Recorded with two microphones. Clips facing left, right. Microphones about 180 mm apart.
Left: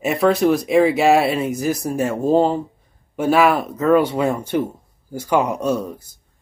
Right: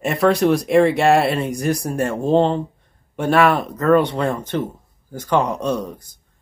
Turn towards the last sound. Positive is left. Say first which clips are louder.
# left 1 dB
turn(degrees=5)  # may be behind; listen again after turning